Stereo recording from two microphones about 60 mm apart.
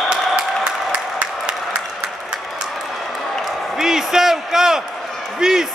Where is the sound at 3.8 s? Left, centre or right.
Centre.